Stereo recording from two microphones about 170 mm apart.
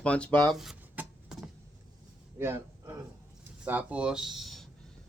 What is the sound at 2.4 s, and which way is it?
A man's voice, 15° right (ahead or behind).